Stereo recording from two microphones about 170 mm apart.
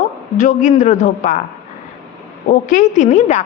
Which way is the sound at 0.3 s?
50° left (ahead or behind).